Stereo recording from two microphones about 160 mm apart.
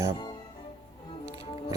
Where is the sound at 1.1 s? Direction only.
35° left (ahead or behind).